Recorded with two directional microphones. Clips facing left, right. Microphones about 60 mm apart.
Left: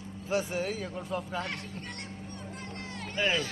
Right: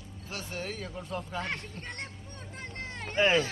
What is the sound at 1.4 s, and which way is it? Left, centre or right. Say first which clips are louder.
Music: right 1 dB; right.